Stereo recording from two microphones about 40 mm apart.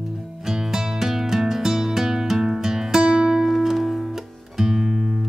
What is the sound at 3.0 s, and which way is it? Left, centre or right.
Music, right.